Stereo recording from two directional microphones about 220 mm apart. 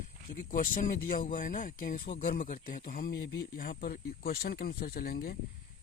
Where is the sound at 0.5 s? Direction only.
40° left (ahead or behind).